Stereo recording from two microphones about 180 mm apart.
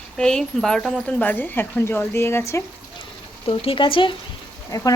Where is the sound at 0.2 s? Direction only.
5° left (ahead or behind).